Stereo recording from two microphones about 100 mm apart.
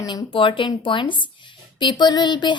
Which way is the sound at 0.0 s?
45° left (ahead or behind).